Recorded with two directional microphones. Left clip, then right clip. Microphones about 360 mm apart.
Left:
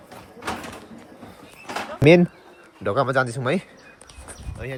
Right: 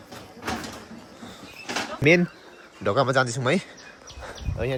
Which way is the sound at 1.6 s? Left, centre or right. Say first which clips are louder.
Left 4 dB; centre.